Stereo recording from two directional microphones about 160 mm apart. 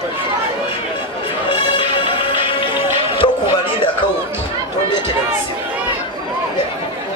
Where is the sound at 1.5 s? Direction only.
30° left (ahead or behind).